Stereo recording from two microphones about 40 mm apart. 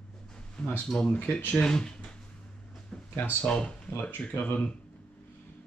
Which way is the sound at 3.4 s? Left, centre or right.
Left.